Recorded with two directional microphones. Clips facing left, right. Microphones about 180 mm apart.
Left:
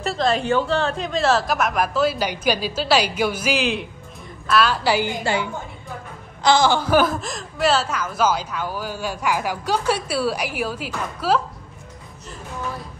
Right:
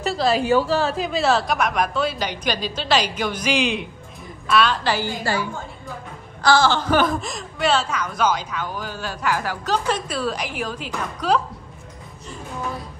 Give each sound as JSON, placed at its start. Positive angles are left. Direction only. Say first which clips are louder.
{"t": 0.0, "sound": "a woman's voice", "louder": "right 1 dB", "side_deg": 0}
{"t": 5.2, "sound": "a woman's voice", "louder": "left 1 dB", "side_deg": 20}